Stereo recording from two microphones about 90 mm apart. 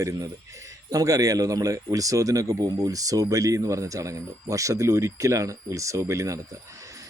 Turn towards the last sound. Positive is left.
turn(degrees=-40)  # may be behind; listen again after turning